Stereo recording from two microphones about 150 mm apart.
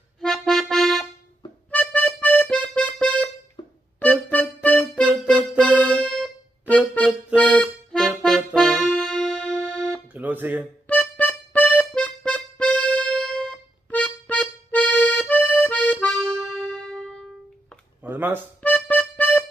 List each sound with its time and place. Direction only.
0.2 s accordion: centre (ahead or behind)
3.6 s music: 30° left (ahead or behind)
4.0 s music: 10° left (ahead or behind)
5.0 s music: 5° right (ahead or behind)
5.6 s music: 10° left (ahead or behind)
10.1 s music: 10° right (ahead or behind)
10.9 s music: 10° left (ahead or behind)
18.0 s telephone dialing: 15° right (ahead or behind)
18.6 s music: 10° left (ahead or behind)